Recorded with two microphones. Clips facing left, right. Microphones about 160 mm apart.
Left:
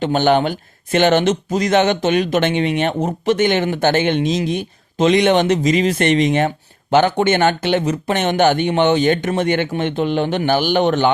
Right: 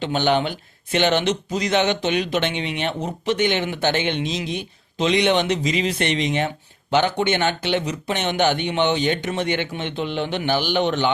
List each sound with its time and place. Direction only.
0.0 s speech: 45° left (ahead or behind)